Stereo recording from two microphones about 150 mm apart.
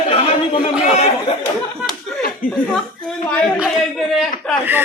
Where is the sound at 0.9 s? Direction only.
50° left (ahead or behind).